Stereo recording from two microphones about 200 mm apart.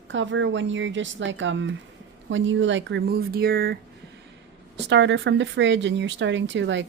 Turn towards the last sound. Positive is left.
turn(degrees=-65)  # may be behind; listen again after turning